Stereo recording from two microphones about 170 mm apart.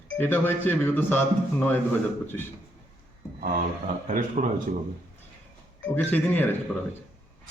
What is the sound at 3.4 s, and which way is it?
A man's voice, 55° right (ahead or behind).